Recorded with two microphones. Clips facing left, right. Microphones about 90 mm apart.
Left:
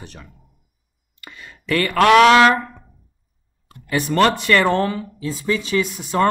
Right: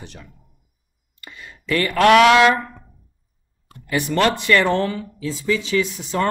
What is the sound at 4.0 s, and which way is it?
Speech, 40° left (ahead or behind).